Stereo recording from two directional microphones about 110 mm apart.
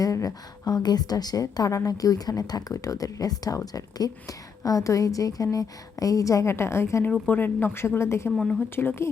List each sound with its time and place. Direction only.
0.0 s a woman's voice: 30° left (ahead or behind)